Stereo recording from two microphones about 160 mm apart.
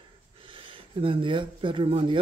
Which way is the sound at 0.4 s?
35° right (ahead or behind).